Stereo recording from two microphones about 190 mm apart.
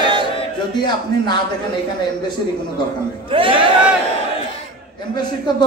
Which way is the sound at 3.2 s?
25° right (ahead or behind).